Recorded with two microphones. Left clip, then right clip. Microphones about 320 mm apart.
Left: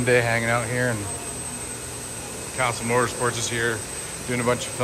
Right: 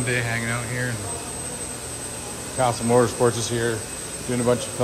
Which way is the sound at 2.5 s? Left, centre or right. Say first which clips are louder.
Right 3 dB; centre.